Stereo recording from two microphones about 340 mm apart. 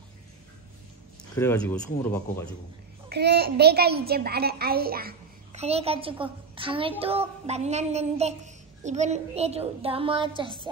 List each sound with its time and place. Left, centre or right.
1.3 s speech: centre
3.1 s a child's voice: right